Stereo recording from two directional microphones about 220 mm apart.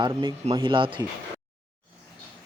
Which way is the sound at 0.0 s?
20° right (ahead or behind).